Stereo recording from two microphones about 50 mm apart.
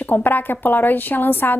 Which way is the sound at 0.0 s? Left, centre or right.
Left.